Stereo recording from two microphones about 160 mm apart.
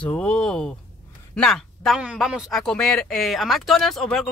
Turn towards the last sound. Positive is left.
turn(degrees=0)  # may be behind; listen again after turning